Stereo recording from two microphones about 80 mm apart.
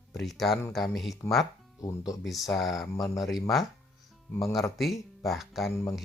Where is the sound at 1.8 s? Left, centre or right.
Left.